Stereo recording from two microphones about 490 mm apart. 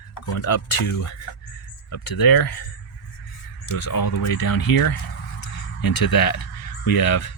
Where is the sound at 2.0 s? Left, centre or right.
Left.